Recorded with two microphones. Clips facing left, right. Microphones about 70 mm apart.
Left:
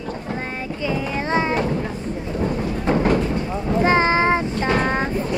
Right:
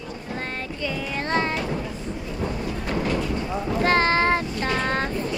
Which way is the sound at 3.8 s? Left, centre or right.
Centre.